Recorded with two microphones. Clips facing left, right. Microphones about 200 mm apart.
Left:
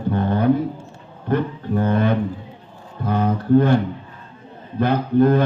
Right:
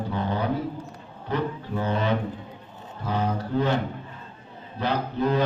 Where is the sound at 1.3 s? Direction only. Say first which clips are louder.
Left 6 dB; 55° left (ahead or behind).